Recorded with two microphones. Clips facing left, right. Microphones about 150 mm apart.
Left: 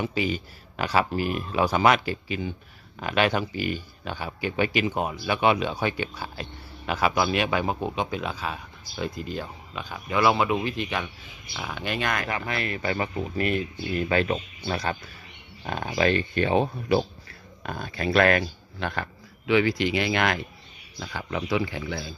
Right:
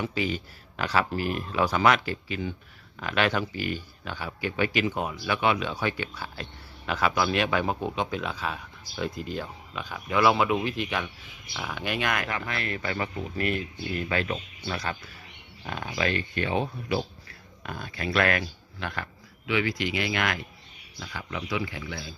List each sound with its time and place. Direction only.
0.0 s speech: 15° left (ahead or behind); by 12.3 s 5° right (ahead or behind)
12.3 s speech: 15° left (ahead or behind)